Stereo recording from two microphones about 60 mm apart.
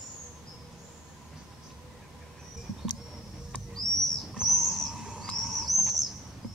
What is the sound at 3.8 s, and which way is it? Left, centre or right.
Bird, centre.